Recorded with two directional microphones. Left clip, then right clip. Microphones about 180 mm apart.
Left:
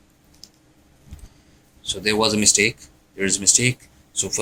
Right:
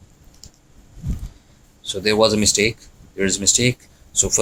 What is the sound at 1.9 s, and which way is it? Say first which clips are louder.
Speech: right 4 dB; 35° right (ahead or behind).